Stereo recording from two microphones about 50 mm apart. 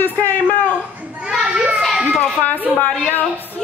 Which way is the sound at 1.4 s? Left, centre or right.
Centre.